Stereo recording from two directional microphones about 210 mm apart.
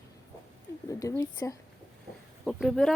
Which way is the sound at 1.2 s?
15° left (ahead or behind).